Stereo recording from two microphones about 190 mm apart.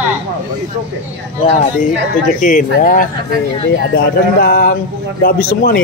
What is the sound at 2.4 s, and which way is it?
Speech, 45° left (ahead or behind).